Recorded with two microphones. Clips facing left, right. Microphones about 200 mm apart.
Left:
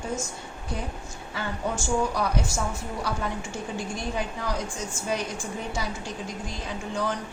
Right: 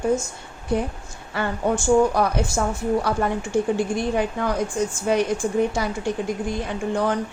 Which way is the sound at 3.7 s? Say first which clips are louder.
Right 8 dB; 60° right (ahead or behind).